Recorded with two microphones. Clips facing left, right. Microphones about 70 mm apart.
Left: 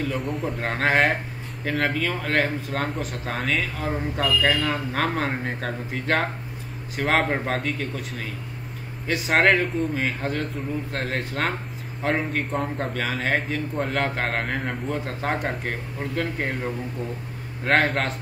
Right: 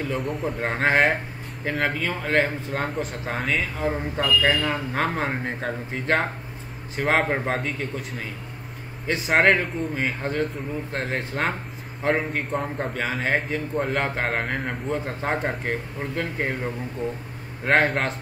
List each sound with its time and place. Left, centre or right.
0.1 s a man's voice: centre
0.6 s a man's voice: centre
17.6 s a man's voice: centre